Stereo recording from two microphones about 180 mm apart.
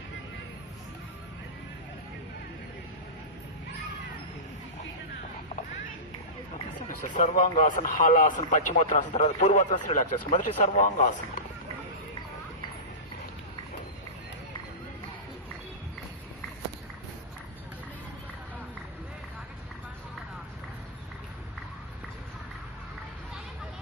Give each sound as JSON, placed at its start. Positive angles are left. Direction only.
{"t": 6.8, "sound": "speech", "side_deg": 45}